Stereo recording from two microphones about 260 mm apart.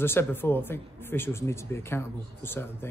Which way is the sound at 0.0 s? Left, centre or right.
Centre.